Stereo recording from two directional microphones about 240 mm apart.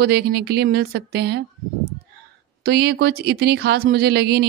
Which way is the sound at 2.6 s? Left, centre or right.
Right.